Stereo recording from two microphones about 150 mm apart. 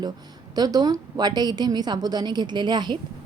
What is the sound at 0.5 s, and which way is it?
A woman's voice, 25° right (ahead or behind).